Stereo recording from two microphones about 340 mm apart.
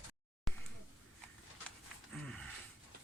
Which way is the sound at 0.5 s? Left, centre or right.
Centre.